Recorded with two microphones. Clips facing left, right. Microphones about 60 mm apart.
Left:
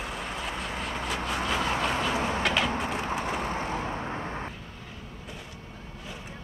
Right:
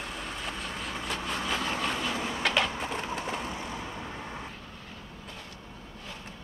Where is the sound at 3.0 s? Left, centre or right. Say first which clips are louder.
Left 4 dB; left.